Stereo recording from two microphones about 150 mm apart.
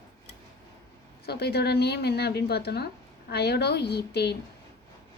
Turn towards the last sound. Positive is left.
turn(degrees=90)